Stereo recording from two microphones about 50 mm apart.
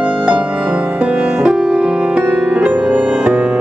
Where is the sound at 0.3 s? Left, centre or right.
Right.